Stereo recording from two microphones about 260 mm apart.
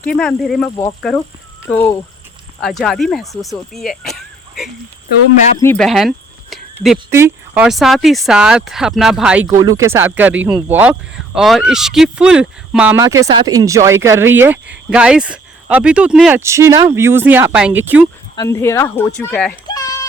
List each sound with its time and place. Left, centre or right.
0.0 s speech: centre
18.3 s speech: centre